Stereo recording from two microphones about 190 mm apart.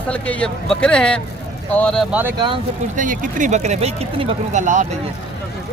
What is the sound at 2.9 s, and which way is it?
Speech, 45° right (ahead or behind).